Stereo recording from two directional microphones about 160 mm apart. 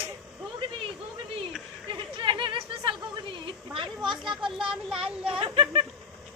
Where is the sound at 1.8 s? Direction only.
30° right (ahead or behind).